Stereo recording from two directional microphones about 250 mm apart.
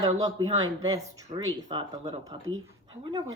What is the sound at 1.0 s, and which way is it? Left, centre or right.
Speech, right.